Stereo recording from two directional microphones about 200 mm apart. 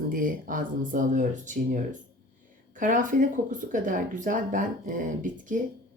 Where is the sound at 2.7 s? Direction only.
40° right (ahead or behind).